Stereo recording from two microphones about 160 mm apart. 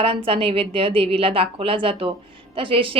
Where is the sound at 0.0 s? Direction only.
35° right (ahead or behind).